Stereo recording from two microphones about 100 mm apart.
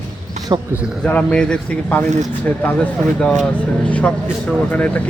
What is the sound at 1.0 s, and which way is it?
Speech, 15° left (ahead or behind).